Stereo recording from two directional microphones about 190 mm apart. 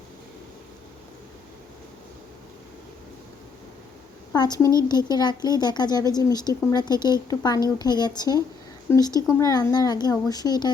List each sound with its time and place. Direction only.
4.3 s speech: 20° left (ahead or behind)